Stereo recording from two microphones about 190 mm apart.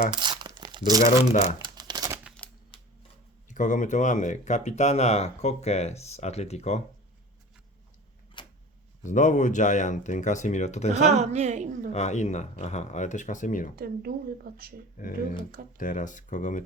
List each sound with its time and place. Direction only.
0.1 s crumpling: 25° right (ahead or behind)
1.3 s speech: 35° left (ahead or behind)
1.5 s crumpling: 20° right (ahead or behind)
2.2 s a sound: 5° left (ahead or behind)
3.5 s speech: 40° left (ahead or behind)
8.4 s a sound: 25° left (ahead or behind)
9.0 s speech: 40° left (ahead or behind)
10.9 s a woman's voice: 35° right (ahead or behind)
11.9 s speech: 35° left (ahead or behind)
13.7 s speech: 55° right (ahead or behind)
14.9 s speech: 45° left (ahead or behind)